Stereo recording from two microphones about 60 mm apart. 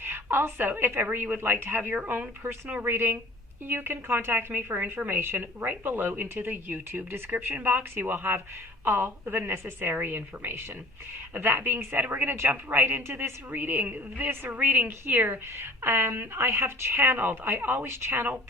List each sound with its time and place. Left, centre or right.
0.0 s a woman's voice: right
17.8 s speech: right